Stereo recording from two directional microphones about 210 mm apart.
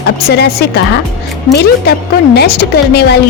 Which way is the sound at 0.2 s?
50° left (ahead or behind).